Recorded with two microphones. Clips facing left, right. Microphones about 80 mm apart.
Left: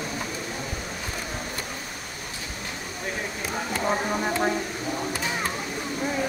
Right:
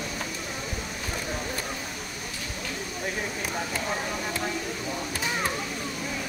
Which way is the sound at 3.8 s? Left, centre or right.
Left.